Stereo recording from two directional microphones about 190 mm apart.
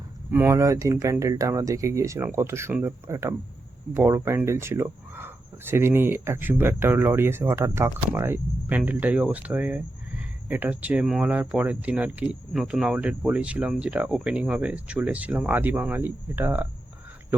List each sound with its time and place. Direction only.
0.3 s speech: 10° right (ahead or behind)